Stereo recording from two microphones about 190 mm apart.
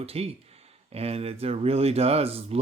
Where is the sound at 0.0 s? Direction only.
30° right (ahead or behind).